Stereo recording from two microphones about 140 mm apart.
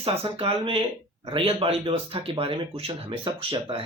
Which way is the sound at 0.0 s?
40° right (ahead or behind).